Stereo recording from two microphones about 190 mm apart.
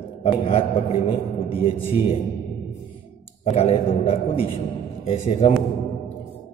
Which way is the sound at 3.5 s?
30° left (ahead or behind).